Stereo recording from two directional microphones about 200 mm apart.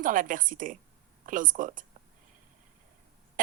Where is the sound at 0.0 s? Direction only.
40° right (ahead or behind).